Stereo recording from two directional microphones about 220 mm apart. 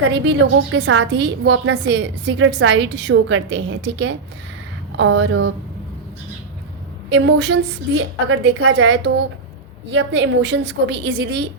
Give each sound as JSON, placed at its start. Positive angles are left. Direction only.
{"t": 0.1, "sound": "a woman's voice", "side_deg": -55}
{"t": 7.1, "sound": "a woman's voice", "side_deg": -55}
{"t": 8.3, "sound": "a woman's voice", "side_deg": -70}